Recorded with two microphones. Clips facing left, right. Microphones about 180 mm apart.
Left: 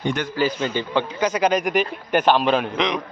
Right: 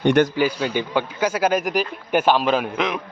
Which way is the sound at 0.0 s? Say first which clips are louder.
Right 8 dB; 65° right (ahead or behind).